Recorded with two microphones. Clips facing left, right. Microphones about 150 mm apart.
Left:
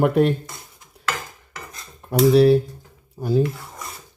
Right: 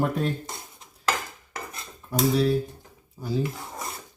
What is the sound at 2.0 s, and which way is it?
Speech, 65° left (ahead or behind).